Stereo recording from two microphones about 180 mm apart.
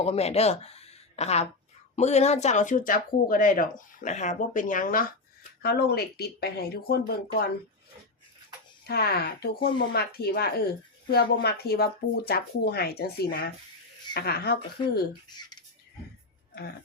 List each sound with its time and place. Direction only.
0.0 s speech: 35° left (ahead or behind); by 7.5 s 60° left (ahead or behind)
8.9 s speech: 60° left (ahead or behind)
15.3 s a sound: 25° left (ahead or behind)